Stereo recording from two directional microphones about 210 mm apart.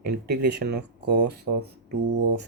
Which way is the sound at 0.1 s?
50° right (ahead or behind).